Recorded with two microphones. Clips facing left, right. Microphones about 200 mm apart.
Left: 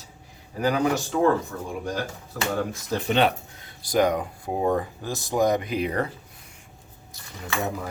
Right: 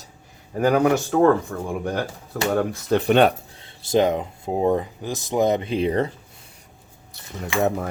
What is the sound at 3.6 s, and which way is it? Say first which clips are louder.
Speech: right 3 dB; 25° right (ahead or behind).